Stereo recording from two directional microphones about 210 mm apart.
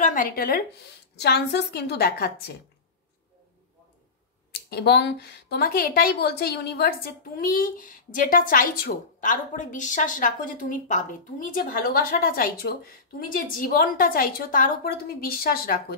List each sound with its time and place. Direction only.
0.0 s speech: 40° left (ahead or behind)
4.5 s speech: 50° left (ahead or behind)